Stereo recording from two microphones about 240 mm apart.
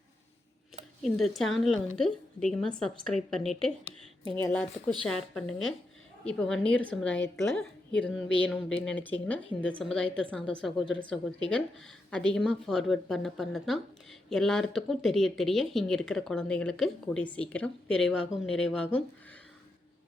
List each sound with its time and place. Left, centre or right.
1.0 s speech: centre